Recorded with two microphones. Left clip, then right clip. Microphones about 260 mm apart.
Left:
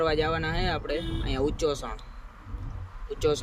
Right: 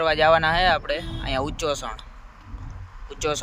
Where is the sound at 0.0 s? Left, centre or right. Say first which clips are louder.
Right 8 dB; centre.